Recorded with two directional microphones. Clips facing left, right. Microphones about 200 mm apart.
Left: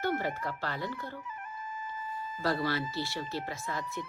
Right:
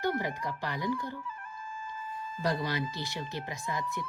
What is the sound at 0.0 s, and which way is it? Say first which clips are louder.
A woman's voice: even; 15° right (ahead or behind).